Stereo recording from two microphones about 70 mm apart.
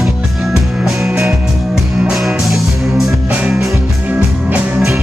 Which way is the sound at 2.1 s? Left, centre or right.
Centre.